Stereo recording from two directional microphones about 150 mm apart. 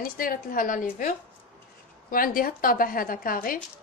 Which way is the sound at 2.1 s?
70° left (ahead or behind).